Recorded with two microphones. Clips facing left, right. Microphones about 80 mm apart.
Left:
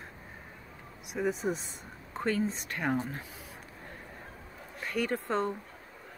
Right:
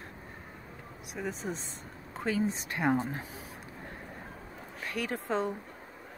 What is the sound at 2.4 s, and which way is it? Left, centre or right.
Speech, centre.